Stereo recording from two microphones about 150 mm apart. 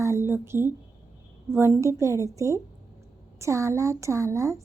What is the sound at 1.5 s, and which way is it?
A woman's voice, 15° right (ahead or behind).